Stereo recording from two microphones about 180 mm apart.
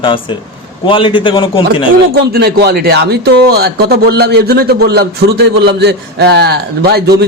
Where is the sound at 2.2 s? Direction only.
60° right (ahead or behind).